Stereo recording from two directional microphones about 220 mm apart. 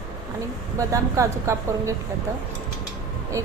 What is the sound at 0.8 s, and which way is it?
A woman's voice, 15° right (ahead or behind).